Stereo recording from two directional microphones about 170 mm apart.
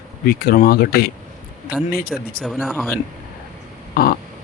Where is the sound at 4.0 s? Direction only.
65° left (ahead or behind).